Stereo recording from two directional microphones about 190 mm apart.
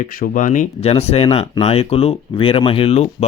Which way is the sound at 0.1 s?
45° left (ahead or behind).